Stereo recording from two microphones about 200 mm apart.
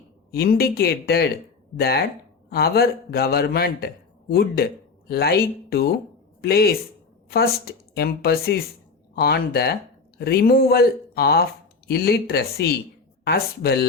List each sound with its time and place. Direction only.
0.3 s a man's voice: 50° left (ahead or behind)